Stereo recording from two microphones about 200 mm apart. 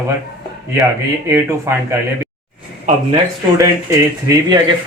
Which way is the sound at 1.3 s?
15° right (ahead or behind).